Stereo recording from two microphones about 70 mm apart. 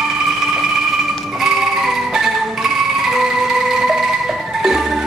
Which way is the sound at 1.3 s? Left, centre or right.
Centre.